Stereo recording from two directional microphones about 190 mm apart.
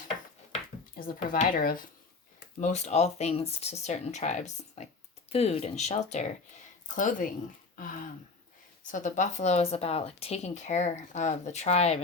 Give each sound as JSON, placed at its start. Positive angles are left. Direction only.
{"t": 0.9, "sound": "speech", "side_deg": 50}
{"t": 8.9, "sound": "speech", "side_deg": 40}